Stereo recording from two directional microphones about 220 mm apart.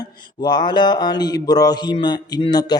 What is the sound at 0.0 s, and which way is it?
Mantra, 20° left (ahead or behind).